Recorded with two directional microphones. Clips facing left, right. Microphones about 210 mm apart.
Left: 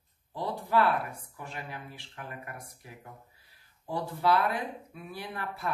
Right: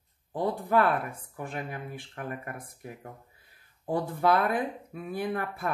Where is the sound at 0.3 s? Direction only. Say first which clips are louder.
Right 4 dB; 50° right (ahead or behind).